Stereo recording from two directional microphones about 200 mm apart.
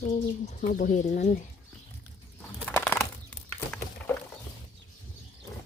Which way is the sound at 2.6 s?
10° left (ahead or behind).